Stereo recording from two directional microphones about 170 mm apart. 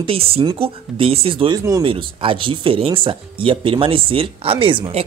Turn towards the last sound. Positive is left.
turn(degrees=-30)  # may be behind; listen again after turning